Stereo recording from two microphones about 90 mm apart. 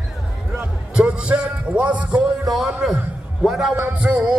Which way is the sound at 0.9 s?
10° right (ahead or behind).